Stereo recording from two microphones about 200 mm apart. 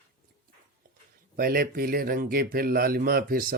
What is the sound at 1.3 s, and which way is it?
Speech, 50° right (ahead or behind).